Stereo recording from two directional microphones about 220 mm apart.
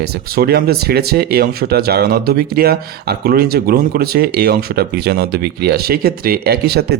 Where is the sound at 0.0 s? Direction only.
45° right (ahead or behind).